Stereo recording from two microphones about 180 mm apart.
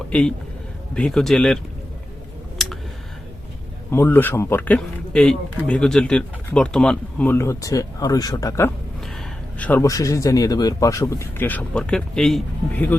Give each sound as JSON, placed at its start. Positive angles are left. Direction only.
{"t": 0.1, "sound": "a man's voice", "side_deg": 5}
{"t": 3.9, "sound": "speech", "side_deg": 10}